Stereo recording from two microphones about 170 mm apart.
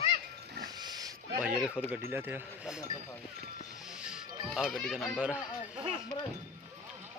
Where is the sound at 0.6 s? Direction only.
25° right (ahead or behind).